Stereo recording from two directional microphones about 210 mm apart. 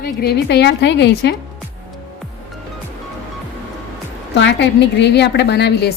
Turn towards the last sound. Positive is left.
turn(degrees=50)  # may be behind; listen again after turning